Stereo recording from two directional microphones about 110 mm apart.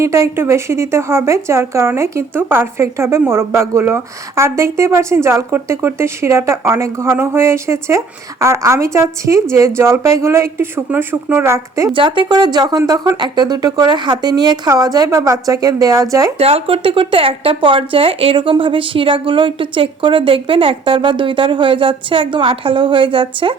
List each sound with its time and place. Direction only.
0.0 s a woman's voice: 25° right (ahead or behind)
11.9 s speech: 50° right (ahead or behind)
12.3 s a woman's voice: 40° right (ahead or behind)
16.4 s speech: 65° right (ahead or behind); by 23.6 s 50° right (ahead or behind)